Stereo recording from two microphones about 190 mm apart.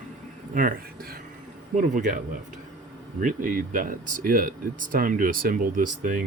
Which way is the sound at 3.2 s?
45° right (ahead or behind).